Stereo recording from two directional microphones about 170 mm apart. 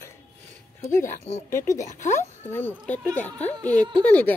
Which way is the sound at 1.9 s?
45° left (ahead or behind).